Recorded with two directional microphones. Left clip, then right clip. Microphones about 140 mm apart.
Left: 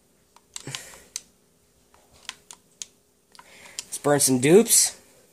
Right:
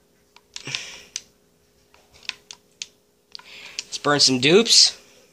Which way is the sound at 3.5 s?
40° left (ahead or behind).